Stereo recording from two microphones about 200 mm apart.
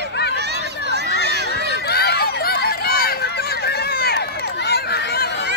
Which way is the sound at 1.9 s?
55° left (ahead or behind).